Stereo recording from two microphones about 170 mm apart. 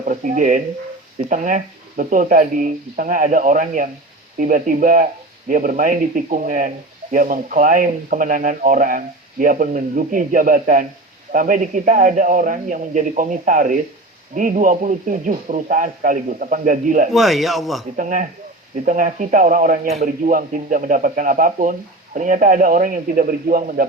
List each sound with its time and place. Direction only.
0.0 s speech: 50° right (ahead or behind)
17.1 s speech: centre (ahead or behind)
17.9 s speech: 50° right (ahead or behind)